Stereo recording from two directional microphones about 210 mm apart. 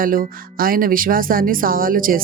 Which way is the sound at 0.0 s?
40° right (ahead or behind).